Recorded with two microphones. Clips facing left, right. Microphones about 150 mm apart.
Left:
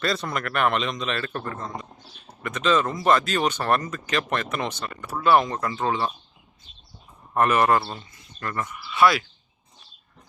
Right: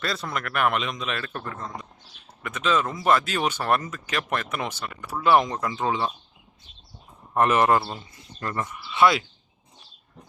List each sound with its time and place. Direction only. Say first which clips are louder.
0.0 s a man's voice: left 3 dB; centre (ahead or behind)
1.5 s speech: left 2 dB; 10° left (ahead or behind)
2.4 s speech: left 2 dB; 5° right (ahead or behind)
7.3 s speech: even; 20° right (ahead or behind)